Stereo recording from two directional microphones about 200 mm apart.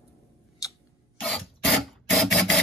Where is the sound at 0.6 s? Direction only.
15° left (ahead or behind).